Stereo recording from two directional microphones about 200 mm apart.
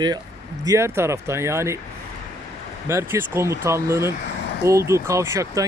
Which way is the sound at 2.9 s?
15° right (ahead or behind).